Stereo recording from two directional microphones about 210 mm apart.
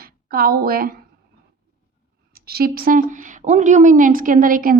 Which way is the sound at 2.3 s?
45° right (ahead or behind).